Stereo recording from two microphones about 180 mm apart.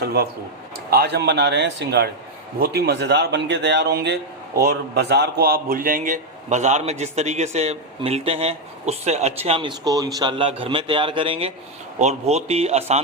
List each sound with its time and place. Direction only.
0.0 s a man's voice: 60° right (ahead or behind); by 13.0 s 35° right (ahead or behind)